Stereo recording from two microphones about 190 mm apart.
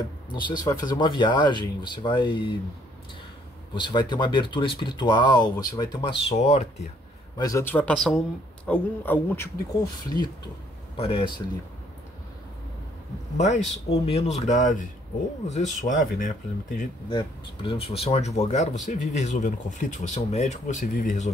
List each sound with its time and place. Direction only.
0.3 s speech: 25° left (ahead or behind)
3.7 s speech: 25° left (ahead or behind)
7.3 s speech: 15° left (ahead or behind)
10.0 s speech: 20° left (ahead or behind)
13.4 s speech: 35° left (ahead or behind)
17.1 s speech: 30° left (ahead or behind); by 21.3 s 45° left (ahead or behind)